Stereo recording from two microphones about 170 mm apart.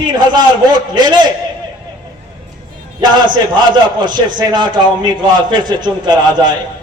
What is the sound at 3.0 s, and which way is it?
A man's voice, 25° right (ahead or behind).